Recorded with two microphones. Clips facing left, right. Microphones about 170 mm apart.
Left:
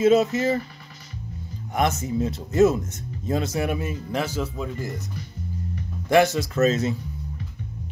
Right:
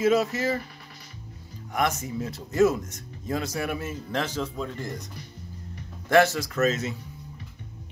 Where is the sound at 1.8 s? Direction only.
25° left (ahead or behind); by 5.0 s 5° left (ahead or behind).